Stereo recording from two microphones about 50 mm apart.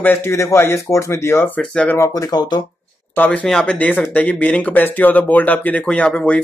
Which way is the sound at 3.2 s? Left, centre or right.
Left.